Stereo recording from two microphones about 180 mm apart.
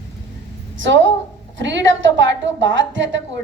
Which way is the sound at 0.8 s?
90° right.